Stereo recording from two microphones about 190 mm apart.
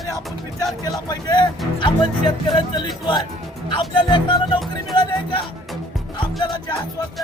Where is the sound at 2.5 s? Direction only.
25° left (ahead or behind).